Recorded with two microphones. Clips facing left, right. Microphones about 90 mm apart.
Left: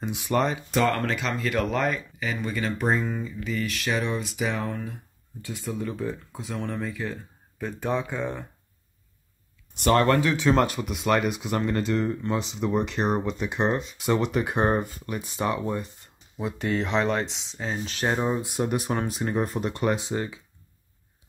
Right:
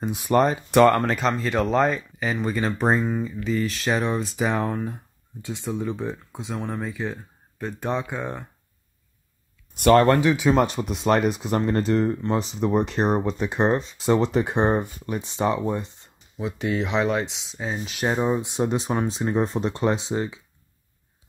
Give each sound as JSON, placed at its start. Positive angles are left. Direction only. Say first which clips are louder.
{"t": 0.0, "sound": "speech", "louder": "right 5 dB", "side_deg": -40}
{"t": 0.7, "sound": "speech", "louder": "right 8 dB", "side_deg": -65}
{"t": 0.9, "sound": "speech", "louder": "right 5 dB", "side_deg": -40}
{"t": 5.4, "sound": "speech", "louder": "right 3 dB", "side_deg": -20}
{"t": 6.5, "sound": "speech", "louder": "right 1 dB", "side_deg": -10}
{"t": 9.9, "sound": "speech", "louder": "right 3 dB", "side_deg": -35}
{"t": 10.2, "sound": "speech", "louder": "right 2 dB", "side_deg": -10}
{"t": 10.7, "sound": "speech", "louder": "right 3 dB", "side_deg": -30}
{"t": 16.3, "sound": "speech", "louder": "right 1 dB", "side_deg": 0}
{"t": 18.4, "sound": "speech", "louder": "right 2 dB", "side_deg": -20}